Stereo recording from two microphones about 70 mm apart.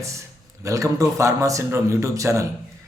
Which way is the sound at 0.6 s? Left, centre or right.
Right.